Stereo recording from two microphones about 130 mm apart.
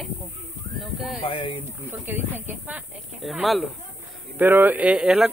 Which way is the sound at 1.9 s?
15° right (ahead or behind).